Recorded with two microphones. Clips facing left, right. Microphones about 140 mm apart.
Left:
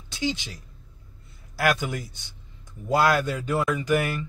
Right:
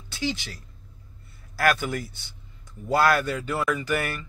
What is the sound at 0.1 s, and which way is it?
Speech, 20° left (ahead or behind).